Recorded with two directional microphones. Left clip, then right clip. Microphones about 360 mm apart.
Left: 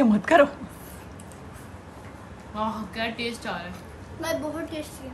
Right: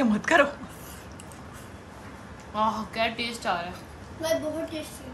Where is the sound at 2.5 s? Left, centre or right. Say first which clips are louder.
Right 4 dB; centre.